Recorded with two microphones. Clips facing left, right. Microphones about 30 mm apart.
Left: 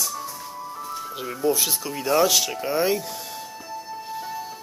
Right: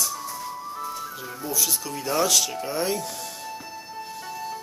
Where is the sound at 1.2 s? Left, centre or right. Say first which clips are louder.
Left 7 dB; left.